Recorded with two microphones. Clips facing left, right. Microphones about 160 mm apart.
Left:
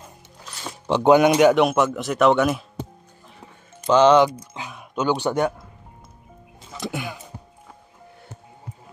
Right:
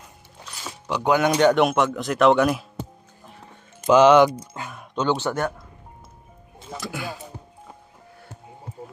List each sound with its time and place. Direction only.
0.8 s speech: 25° left (ahead or behind)
1.3 s speech: 5° left (ahead or behind)
3.8 s speech: 10° right (ahead or behind)
4.6 s speech: 5° left (ahead or behind)
6.8 s music: 20° left (ahead or behind)